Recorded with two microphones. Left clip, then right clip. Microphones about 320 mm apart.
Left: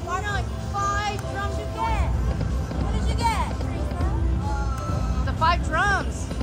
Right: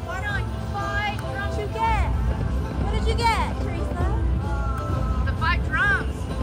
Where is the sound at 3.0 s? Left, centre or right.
Right.